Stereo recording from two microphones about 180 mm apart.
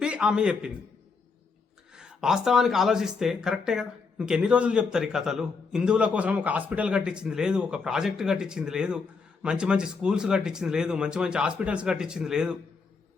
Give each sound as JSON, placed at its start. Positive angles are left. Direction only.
{"t": 0.0, "sound": "a man's voice", "side_deg": -5}
{"t": 2.0, "sound": "speech", "side_deg": -5}